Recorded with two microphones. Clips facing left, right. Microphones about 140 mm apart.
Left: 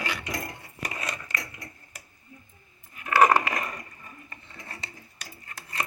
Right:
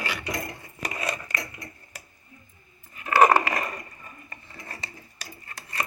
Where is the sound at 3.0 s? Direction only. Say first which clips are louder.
Right 2 dB; 25° right (ahead or behind).